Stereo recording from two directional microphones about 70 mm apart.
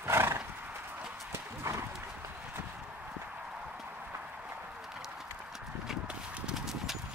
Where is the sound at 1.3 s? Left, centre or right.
Right.